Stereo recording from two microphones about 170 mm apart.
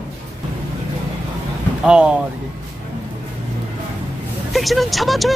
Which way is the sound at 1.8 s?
5° right (ahead or behind).